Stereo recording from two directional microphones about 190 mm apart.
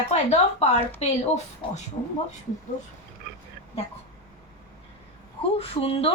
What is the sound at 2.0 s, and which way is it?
Speech, 25° left (ahead or behind).